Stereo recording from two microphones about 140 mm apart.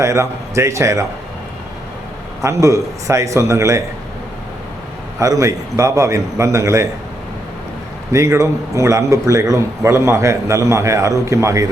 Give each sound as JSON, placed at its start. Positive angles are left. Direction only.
{"t": 0.0, "sound": "a man's voice", "side_deg": -20}
{"t": 2.4, "sound": "a man's voice", "side_deg": -20}
{"t": 5.2, "sound": "a man's voice", "side_deg": -25}
{"t": 8.1, "sound": "a man's voice", "side_deg": -20}